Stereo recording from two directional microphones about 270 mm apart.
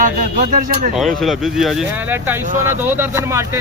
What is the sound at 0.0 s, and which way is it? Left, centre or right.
Speech, right.